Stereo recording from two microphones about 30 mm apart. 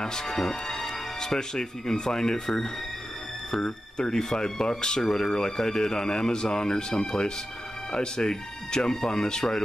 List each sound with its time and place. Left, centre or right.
0.0 s speech: left